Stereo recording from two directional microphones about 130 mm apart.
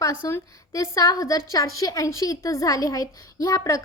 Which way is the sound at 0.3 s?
20° left (ahead or behind).